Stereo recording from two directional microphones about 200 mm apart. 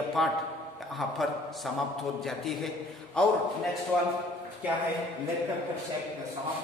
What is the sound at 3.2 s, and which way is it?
Speech, 5° left (ahead or behind).